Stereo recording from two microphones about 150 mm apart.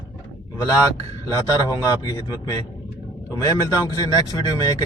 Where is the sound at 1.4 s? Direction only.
25° left (ahead or behind).